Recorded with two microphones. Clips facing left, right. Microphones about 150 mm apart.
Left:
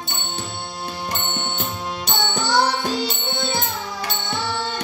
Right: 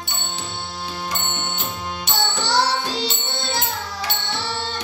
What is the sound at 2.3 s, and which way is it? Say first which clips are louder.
Music: left 2 dB; 50° left (ahead or behind).